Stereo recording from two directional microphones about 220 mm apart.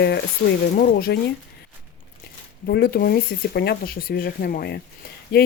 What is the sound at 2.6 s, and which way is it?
Speech, 45° left (ahead or behind).